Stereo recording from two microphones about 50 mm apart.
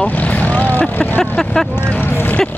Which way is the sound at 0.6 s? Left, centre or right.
Left.